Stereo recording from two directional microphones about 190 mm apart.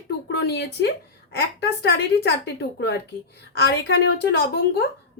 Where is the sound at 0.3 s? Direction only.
60° left (ahead or behind).